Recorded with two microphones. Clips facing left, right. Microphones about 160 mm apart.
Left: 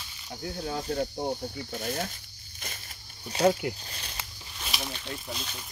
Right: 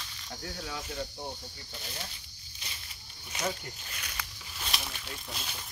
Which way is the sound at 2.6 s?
50° left (ahead or behind).